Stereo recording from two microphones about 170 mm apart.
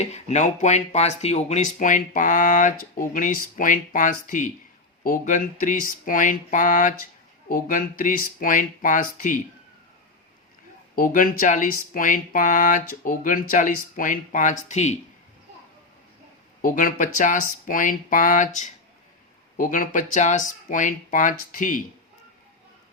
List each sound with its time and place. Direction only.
0.0 s speech: 40° left (ahead or behind)
10.9 s speech: 55° left (ahead or behind)
16.6 s speech: 55° left (ahead or behind)